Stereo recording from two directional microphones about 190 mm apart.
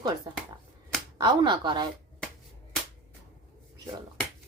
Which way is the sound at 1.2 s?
20° right (ahead or behind).